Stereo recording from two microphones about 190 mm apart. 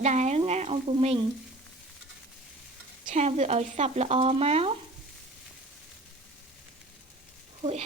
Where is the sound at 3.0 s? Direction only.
35° right (ahead or behind).